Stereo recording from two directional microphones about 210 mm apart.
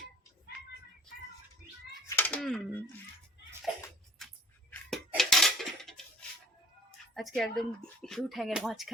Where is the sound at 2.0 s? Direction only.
10° left (ahead or behind).